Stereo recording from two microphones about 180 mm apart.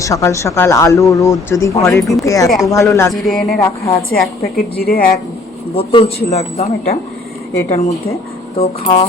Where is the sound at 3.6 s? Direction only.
15° left (ahead or behind).